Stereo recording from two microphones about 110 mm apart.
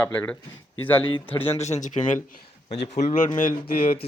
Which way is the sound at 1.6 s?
90° left.